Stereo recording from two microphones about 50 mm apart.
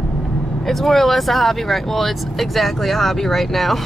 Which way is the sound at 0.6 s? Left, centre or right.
Centre.